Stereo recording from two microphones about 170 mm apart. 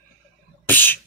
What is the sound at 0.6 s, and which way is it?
Speech, 10° left (ahead or behind).